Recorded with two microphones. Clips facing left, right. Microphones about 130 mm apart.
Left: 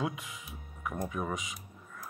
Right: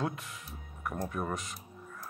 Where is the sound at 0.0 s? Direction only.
5° left (ahead or behind).